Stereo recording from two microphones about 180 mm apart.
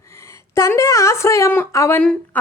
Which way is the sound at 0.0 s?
15° left (ahead or behind).